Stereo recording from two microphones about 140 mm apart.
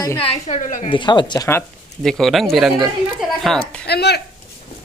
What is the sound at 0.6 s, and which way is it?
Speech, 60° left (ahead or behind).